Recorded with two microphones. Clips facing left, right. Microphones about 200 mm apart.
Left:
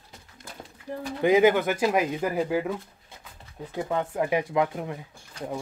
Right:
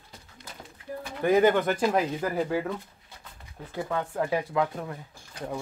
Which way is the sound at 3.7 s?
15° left (ahead or behind).